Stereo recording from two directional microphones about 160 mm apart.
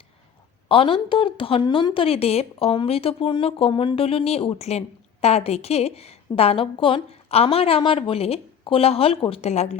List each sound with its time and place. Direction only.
0.7 s a woman's voice: 35° left (ahead or behind)